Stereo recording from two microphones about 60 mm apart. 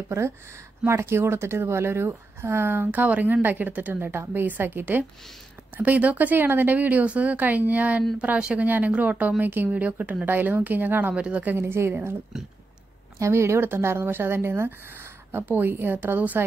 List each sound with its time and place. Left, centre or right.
0.1 s a woman's voice: right
3.9 s a woman's voice: right
9.4 s a woman's voice: right
9.7 s a woman's voice: right
11.1 s speech: centre
11.5 s a woman's voice: right
13.2 s a woman's voice: right